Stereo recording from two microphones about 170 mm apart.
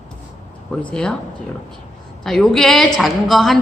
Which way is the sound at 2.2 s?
5° left (ahead or behind).